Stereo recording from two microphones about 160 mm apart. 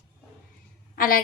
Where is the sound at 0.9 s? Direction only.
60° left (ahead or behind).